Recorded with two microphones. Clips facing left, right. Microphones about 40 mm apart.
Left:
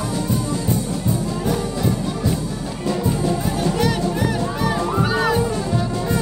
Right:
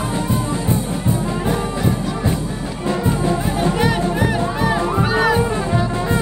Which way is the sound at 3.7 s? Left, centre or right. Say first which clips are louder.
Right 2 dB; right.